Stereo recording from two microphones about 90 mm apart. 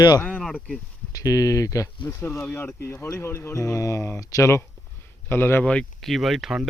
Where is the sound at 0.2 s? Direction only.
10° left (ahead or behind).